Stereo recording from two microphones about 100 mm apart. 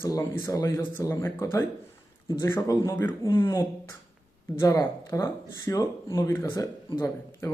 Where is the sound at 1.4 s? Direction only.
25° left (ahead or behind).